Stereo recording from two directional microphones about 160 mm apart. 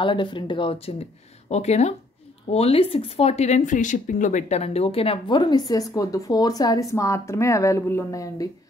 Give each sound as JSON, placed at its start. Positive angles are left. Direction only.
{"t": 0.0, "sound": "speech", "side_deg": 30}